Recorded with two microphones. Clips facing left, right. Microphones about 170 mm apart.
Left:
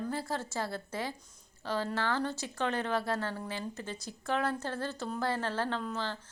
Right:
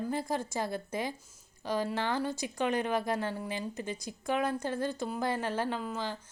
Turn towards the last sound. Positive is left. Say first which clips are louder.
# right 1 dB
turn(degrees=-10)  # may be behind; listen again after turning